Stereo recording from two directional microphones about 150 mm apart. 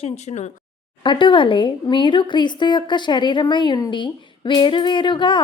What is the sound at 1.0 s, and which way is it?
A woman's voice, 35° left (ahead or behind).